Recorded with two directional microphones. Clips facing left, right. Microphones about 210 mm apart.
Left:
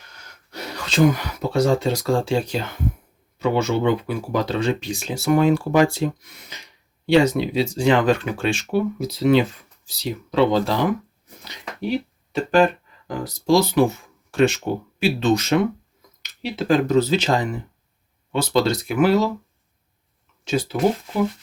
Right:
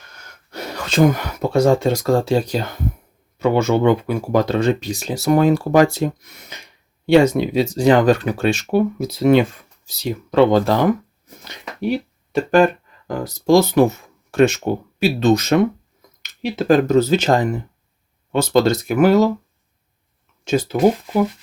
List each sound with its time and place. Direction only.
0.5 s speech: 50° right (ahead or behind)
3.3 s speech: 50° right (ahead or behind)
20.4 s speech: 45° right (ahead or behind)